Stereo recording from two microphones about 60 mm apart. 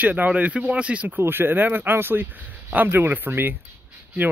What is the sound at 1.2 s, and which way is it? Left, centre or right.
Speech, right.